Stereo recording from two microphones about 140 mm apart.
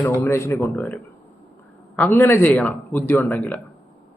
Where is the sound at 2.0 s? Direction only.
15° left (ahead or behind).